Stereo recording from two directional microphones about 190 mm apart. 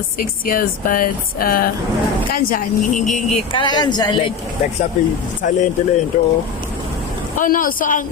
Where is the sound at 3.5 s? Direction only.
25° left (ahead or behind).